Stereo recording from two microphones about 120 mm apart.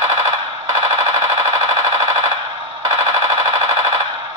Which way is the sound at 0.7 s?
25° right (ahead or behind).